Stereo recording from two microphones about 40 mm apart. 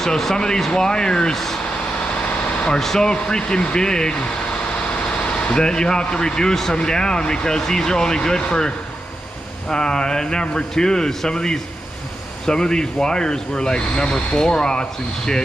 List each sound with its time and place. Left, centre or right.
0.0 s speech: centre
1.3 s speech: centre
2.8 s speech: centre
3.1 s speech: centre
5.5 s speech: centre